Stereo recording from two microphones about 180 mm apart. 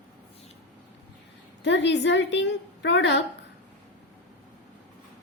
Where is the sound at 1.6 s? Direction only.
75° left (ahead or behind).